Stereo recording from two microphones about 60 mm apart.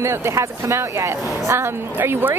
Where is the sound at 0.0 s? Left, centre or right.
Right.